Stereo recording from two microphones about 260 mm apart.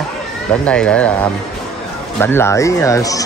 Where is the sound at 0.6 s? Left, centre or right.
Centre.